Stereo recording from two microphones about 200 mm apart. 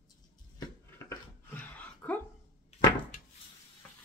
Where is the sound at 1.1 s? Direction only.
10° left (ahead or behind).